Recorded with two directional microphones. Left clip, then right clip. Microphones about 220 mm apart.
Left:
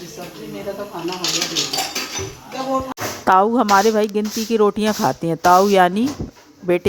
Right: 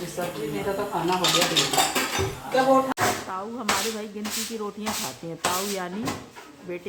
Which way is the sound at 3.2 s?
45° left (ahead or behind).